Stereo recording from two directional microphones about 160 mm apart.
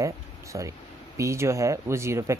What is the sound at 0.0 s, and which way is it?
Speech, 20° right (ahead or behind).